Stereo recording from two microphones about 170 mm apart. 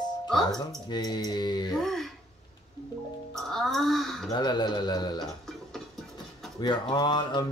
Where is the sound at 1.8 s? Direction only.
Centre (ahead or behind).